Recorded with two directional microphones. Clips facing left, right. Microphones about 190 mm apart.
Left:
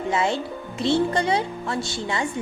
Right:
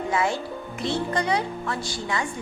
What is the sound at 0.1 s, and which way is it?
A woman's voice, 25° left (ahead or behind).